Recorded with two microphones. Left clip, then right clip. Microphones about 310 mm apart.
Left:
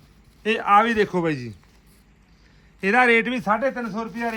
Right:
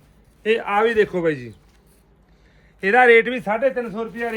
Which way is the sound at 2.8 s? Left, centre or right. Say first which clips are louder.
Right 4 dB; centre.